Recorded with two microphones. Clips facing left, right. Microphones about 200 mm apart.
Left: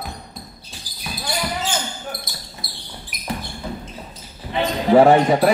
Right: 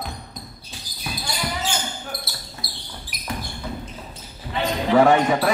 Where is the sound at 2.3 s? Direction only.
15° left (ahead or behind).